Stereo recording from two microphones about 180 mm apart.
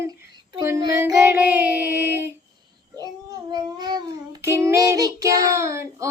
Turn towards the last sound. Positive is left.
turn(degrees=-15)  # may be behind; listen again after turning